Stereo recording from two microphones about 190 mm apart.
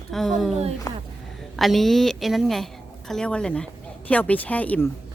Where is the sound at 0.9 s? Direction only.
15° left (ahead or behind).